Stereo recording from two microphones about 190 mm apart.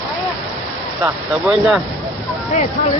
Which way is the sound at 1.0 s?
Centre (ahead or behind).